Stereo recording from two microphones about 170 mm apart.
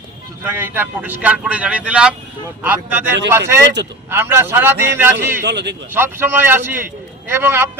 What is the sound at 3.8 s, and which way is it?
Speech, 90° right.